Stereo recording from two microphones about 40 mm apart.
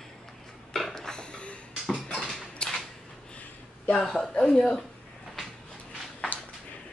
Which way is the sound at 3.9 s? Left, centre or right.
Centre.